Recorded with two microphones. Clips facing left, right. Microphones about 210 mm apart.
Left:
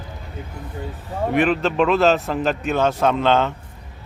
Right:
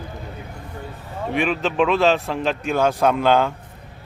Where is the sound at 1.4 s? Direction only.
Centre (ahead or behind).